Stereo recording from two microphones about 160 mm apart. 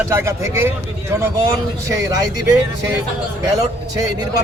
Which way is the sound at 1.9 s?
20° right (ahead or behind).